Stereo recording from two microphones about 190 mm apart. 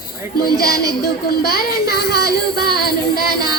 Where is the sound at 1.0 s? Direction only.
55° left (ahead or behind).